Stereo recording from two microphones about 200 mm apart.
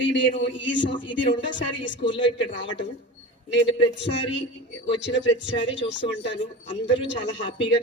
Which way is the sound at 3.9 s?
60° left (ahead or behind).